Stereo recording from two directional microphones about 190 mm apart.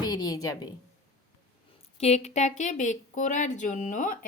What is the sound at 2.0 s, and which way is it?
A woman's voice, 35° left (ahead or behind).